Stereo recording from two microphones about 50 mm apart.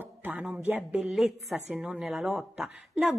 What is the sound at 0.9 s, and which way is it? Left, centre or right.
Speech, centre.